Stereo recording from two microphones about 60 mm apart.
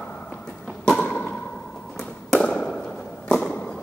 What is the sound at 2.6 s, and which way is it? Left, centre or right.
Whip, centre.